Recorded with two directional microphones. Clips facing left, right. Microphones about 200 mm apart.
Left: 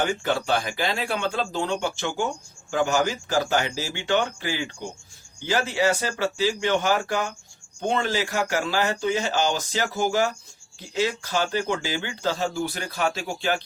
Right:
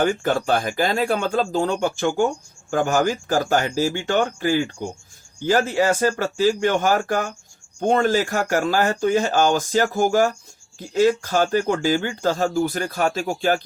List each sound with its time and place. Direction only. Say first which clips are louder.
0.0 s speech: right 5 dB; 45° right (ahead or behind)